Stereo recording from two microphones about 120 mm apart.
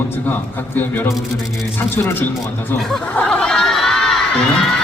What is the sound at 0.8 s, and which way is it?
Speech, 20° left (ahead or behind).